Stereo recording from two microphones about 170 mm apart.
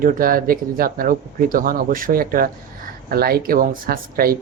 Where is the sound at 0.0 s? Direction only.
55° right (ahead or behind).